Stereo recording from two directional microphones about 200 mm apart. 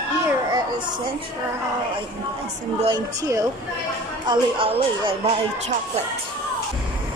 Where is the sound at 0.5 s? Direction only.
20° right (ahead or behind).